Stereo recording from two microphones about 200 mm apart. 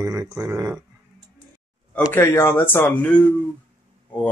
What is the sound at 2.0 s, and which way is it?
Speech, 10° left (ahead or behind).